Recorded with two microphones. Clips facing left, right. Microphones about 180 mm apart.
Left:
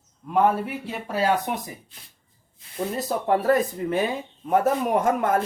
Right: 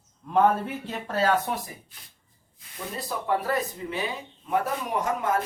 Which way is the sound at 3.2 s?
50° left (ahead or behind).